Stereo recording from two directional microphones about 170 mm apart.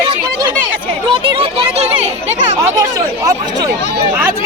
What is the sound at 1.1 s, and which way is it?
Speech, 35° right (ahead or behind).